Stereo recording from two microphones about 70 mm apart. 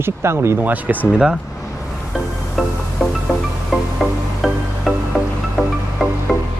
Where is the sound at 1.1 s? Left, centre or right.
Centre.